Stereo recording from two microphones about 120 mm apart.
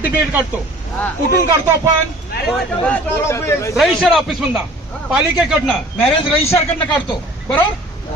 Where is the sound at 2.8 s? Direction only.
15° left (ahead or behind).